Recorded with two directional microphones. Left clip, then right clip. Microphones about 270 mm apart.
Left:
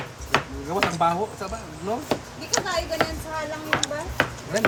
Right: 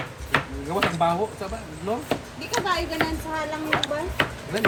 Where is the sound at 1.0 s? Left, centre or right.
Centre.